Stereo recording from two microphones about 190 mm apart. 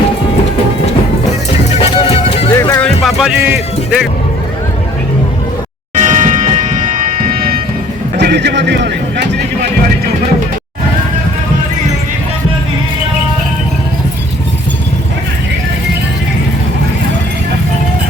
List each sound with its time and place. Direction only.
1.8 s music: 30° left (ahead or behind)
2.6 s music: 20° left (ahead or behind)
2.8 s music: centre (ahead or behind)
6.0 s music: 40° right (ahead or behind)
8.2 s a sound: 60° right (ahead or behind)